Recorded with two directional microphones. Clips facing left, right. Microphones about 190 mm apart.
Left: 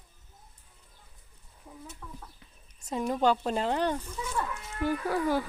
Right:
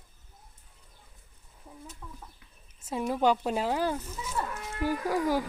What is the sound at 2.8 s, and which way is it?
Speech, 5° right (ahead or behind).